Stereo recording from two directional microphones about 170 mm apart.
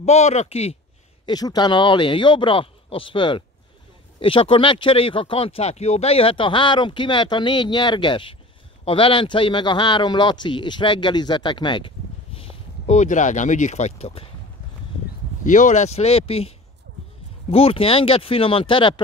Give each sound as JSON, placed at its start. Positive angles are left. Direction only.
{"t": 0.0, "sound": "speech", "side_deg": 40}
{"t": 1.2, "sound": "a man's voice", "side_deg": 25}
{"t": 12.4, "sound": "speech", "side_deg": 40}
{"t": 15.4, "sound": "speech", "side_deg": 50}